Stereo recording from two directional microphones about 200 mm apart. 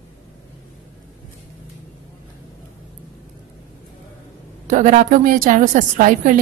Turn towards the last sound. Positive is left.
turn(degrees=-40)  # may be behind; listen again after turning